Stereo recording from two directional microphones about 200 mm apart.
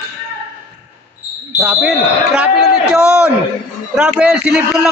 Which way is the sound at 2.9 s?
5° right (ahead or behind).